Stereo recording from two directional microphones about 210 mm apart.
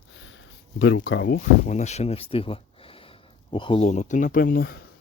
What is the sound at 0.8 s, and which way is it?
Speech, 60° left (ahead or behind).